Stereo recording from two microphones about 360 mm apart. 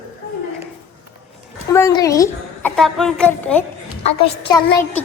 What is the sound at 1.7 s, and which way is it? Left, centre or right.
A woman's voice, centre.